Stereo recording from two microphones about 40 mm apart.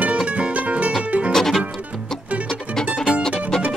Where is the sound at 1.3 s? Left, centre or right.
Centre.